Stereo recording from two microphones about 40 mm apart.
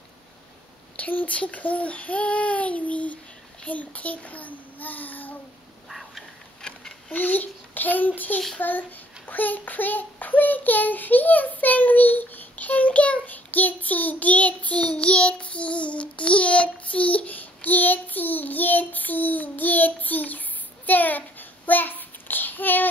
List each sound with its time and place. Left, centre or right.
0.9 s speech: left
5.9 s a sound: centre
7.1 s a child's voice: left
8.5 s child singing: left